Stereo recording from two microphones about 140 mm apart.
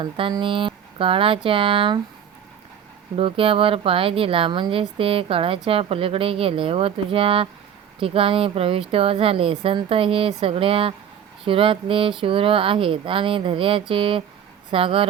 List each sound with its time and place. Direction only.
0.0 s speech: 35° right (ahead or behind)
3.2 s speech: 40° right (ahead or behind)